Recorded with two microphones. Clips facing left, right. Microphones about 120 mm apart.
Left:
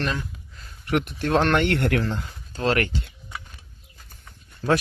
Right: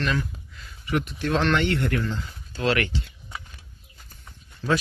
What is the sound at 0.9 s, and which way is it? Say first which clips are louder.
Speech: left 2 dB; 60° left (ahead or behind).